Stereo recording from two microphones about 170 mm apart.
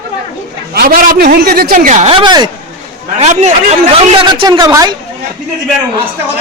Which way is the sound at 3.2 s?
40° right (ahead or behind).